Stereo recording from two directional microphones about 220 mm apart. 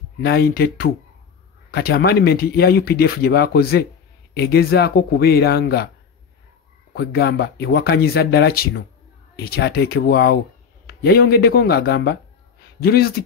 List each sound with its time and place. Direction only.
0.2 s speech: 45° left (ahead or behind)
6.9 s speech: 50° left (ahead or behind)